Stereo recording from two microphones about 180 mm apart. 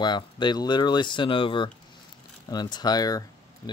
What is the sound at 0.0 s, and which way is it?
Speech, 25° left (ahead or behind).